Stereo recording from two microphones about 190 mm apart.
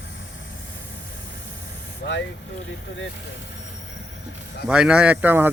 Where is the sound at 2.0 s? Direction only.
65° left (ahead or behind).